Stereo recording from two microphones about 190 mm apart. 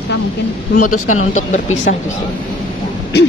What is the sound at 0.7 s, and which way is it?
A woman's voice, 45° left (ahead or behind).